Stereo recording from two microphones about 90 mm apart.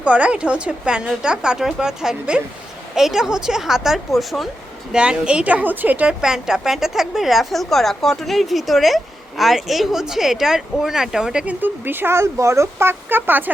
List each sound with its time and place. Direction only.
0.0 s a woman's voice: 15° right (ahead or behind)
4.9 s a woman's voice: 10° right (ahead or behind)
6.2 s a woman's voice: 5° right (ahead or behind)
11.6 s speech: 25° right (ahead or behind)